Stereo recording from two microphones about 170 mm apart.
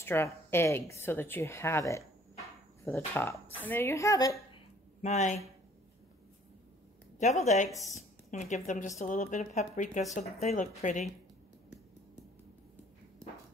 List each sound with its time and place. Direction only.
0.0 s speech: 15° left (ahead or behind)
5.0 s speech: 45° left (ahead or behind)
7.4 s speech: 45° left (ahead or behind)
7.7 s a woman's voice: centre (ahead or behind)
8.3 s speech: 45° left (ahead or behind)